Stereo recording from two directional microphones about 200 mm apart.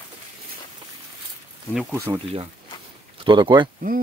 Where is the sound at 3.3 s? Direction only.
20° right (ahead or behind).